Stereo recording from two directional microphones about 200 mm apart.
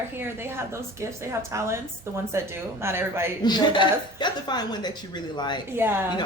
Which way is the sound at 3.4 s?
20° left (ahead or behind).